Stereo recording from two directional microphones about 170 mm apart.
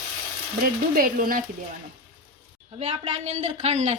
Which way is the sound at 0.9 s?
55° right (ahead or behind).